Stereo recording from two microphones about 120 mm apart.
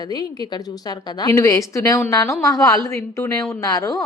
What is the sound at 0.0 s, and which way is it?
A woman's voice, 35° left (ahead or behind).